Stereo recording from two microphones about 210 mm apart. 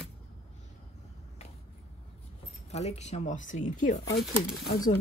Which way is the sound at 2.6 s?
30° left (ahead or behind).